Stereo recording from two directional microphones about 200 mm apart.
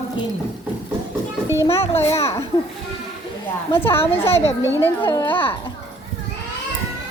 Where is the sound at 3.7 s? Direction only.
10° left (ahead or behind).